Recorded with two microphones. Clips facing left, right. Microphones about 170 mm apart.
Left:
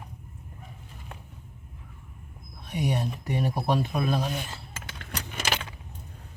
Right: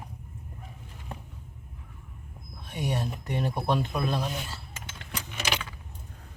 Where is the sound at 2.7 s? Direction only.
10° left (ahead or behind).